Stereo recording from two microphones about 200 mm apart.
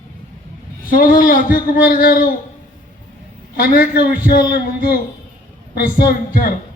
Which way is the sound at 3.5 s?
45° left (ahead or behind).